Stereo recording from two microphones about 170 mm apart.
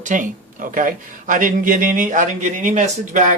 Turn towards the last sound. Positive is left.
turn(degrees=-45)  # may be behind; listen again after turning